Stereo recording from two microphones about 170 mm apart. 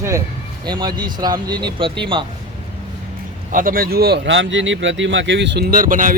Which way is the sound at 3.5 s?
55° right (ahead or behind).